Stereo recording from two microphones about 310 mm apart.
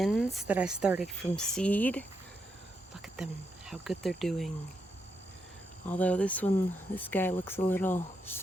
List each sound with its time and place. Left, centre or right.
0.0 s speech: centre
2.9 s cricket: centre
3.7 s speech: centre
5.9 s speech: centre